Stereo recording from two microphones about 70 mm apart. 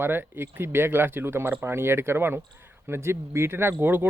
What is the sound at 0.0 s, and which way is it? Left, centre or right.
Speech, right.